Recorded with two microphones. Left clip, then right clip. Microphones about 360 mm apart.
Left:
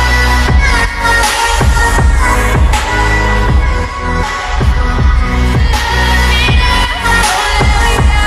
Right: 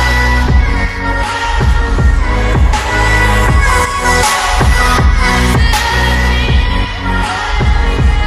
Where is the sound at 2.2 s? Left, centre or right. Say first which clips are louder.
Left 4 dB; centre.